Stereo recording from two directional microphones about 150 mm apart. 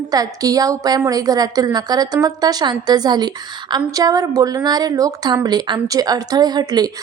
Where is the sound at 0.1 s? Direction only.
25° right (ahead or behind).